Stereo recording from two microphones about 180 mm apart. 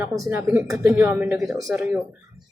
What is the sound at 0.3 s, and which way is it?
Speech, 10° right (ahead or behind).